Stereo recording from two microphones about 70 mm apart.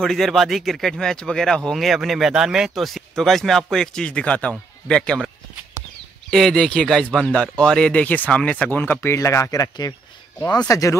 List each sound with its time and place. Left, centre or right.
0.0 s speech: centre
6.3 s speech: centre; by 11.0 s left